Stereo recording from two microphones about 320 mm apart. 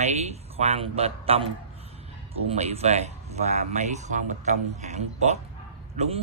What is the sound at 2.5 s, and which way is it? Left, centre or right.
A man's voice, centre.